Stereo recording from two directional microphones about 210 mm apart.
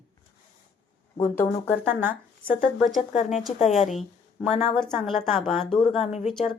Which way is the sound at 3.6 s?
Centre (ahead or behind).